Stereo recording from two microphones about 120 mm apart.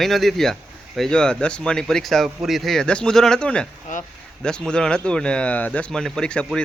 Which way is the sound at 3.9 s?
90° left.